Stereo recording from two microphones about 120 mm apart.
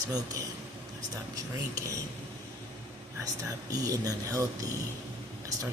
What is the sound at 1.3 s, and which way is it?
Speech, 25° right (ahead or behind).